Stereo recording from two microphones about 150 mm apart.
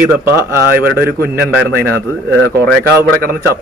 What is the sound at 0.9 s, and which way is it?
Speech, 90° right.